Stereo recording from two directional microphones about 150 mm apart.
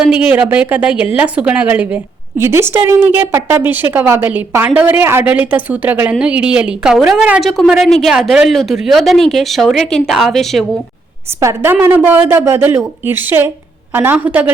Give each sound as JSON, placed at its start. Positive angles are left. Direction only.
{"t": 0.0, "sound": "a woman's voice", "side_deg": -10}
{"t": 11.3, "sound": "a woman's voice", "side_deg": -15}